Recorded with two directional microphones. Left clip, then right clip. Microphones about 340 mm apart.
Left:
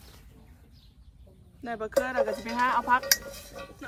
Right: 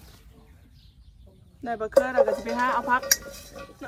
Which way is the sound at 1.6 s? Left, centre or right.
Centre.